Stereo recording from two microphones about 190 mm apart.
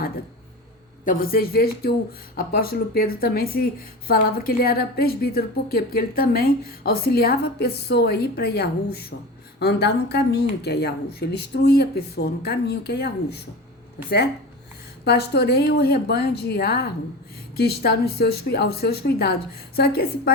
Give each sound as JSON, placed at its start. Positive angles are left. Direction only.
{"t": 1.0, "sound": "speech", "side_deg": 45}
{"t": 15.0, "sound": "speech", "side_deg": 60}